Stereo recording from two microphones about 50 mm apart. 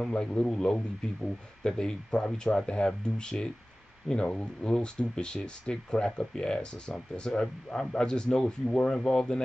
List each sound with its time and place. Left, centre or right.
0.0 s speech: centre